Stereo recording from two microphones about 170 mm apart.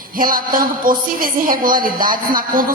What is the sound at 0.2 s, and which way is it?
A woman's voice, 55° right (ahead or behind).